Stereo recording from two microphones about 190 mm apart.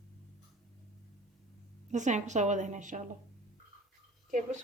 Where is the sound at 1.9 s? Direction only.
40° right (ahead or behind).